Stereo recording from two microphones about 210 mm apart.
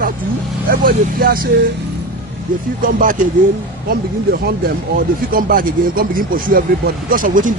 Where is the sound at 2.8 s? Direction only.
40° right (ahead or behind).